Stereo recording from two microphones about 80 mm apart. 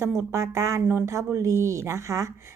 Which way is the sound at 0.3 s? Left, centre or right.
Right.